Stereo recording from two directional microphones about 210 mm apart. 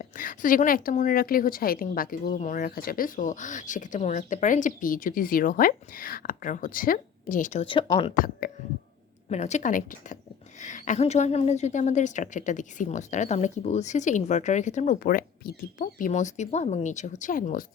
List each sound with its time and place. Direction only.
0.0 s a woman's voice: 40° left (ahead or behind)
7.6 s speech: 25° left (ahead or behind)
9.3 s a woman's voice: 35° left (ahead or behind)